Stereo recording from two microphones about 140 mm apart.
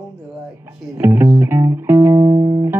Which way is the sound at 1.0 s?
15° right (ahead or behind).